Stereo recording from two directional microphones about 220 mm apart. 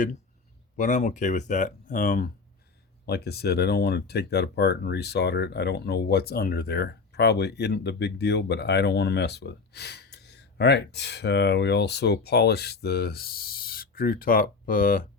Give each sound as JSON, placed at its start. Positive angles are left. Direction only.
{"t": 0.8, "sound": "speech", "side_deg": 35}